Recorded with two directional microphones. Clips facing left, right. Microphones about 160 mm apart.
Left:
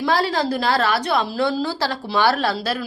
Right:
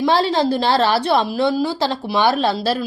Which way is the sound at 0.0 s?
25° right (ahead or behind).